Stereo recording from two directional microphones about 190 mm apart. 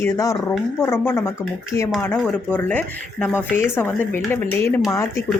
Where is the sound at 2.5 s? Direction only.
5° left (ahead or behind).